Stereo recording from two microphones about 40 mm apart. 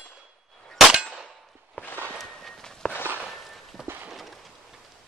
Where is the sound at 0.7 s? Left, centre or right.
Centre.